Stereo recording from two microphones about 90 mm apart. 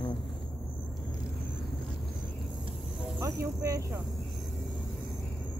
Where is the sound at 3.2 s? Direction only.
40° right (ahead or behind).